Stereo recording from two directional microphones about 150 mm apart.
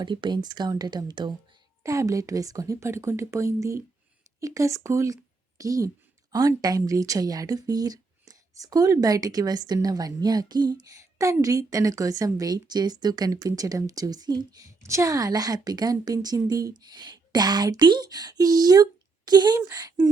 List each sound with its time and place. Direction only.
0.0 s speech: 30° right (ahead or behind)